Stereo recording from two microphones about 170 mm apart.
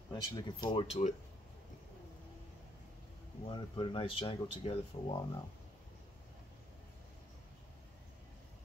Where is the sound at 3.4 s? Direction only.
30° left (ahead or behind).